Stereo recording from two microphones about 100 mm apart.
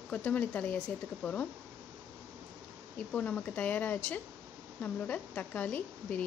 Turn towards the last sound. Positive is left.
turn(degrees=15)  # may be behind; listen again after turning